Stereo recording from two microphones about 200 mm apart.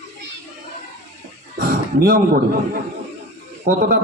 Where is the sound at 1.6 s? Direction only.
50° right (ahead or behind).